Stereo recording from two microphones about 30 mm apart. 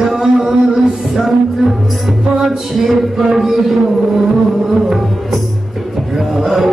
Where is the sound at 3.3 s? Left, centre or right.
Centre.